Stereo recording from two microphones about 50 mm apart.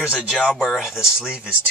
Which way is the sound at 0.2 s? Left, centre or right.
Right.